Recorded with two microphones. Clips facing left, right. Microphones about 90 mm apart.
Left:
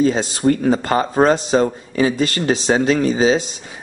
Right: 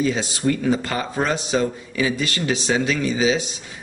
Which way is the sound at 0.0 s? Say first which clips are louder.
Left 5 dB; 40° left (ahead or behind).